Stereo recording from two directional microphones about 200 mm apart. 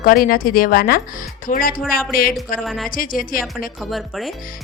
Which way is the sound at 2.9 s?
45° left (ahead or behind).